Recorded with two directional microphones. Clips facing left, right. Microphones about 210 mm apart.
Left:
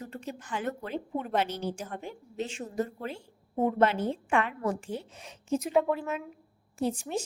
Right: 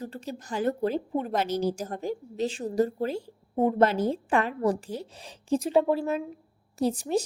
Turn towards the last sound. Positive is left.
turn(degrees=-35)  # may be behind; listen again after turning